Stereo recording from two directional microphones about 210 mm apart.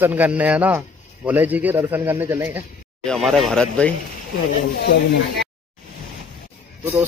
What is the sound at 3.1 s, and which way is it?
Speech, centre (ahead or behind).